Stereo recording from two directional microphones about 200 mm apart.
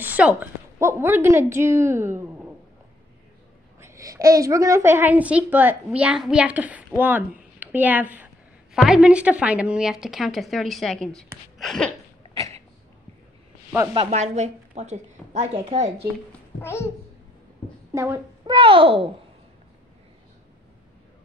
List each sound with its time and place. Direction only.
0.0 s a woman's voice: 5° right (ahead or behind)
3.8 s a woman's voice: 15° right (ahead or behind)
7.5 s a sound: 10° right (ahead or behind)
8.8 s a woman's voice: 5° right (ahead or behind)
13.9 s a woman's voice: 35° right (ahead or behind)
16.3 s a sound: 10° left (ahead or behind)
17.9 s speech: 15° right (ahead or behind)
18.6 s a child's voice: 25° right (ahead or behind)